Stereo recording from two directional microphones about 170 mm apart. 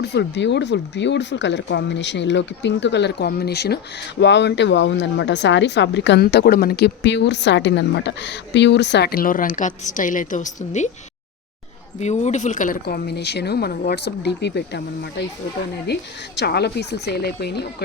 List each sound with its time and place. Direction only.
0.0 s speech: 90° left; by 3.8 s 70° left (ahead or behind)
4.2 s speech: 90° left; by 10.9 s 45° left (ahead or behind)
11.9 s speech: 40° left (ahead or behind); by 14.8 s 80° left
15.9 s speech: 85° left